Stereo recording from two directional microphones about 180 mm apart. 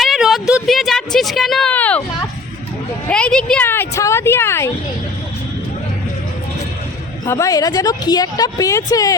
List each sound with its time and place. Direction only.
0.0 s a sound: centre (ahead or behind)
3.1 s speech: 5° left (ahead or behind)
7.3 s a woman's voice: 15° left (ahead or behind)